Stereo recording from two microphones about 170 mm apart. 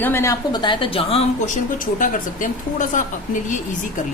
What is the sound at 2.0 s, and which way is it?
Speech, 50° left (ahead or behind).